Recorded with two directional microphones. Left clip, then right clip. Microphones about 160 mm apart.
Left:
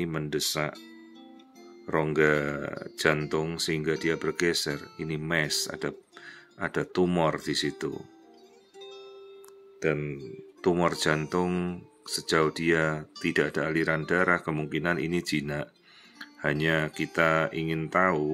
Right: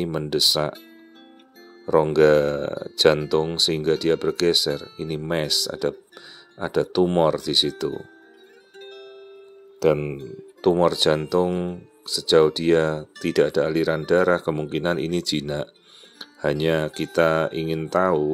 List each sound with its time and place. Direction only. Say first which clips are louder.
0.0 s speech: right 9 dB; 25° right (ahead or behind)
1.9 s speech: right 8 dB; 25° right (ahead or behind)
8.7 s music: right 4 dB; 5° right (ahead or behind)
10.6 s speech: right 7 dB; 20° right (ahead or behind)